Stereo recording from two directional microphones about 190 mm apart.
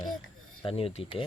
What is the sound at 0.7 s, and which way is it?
Speech, 30° left (ahead or behind).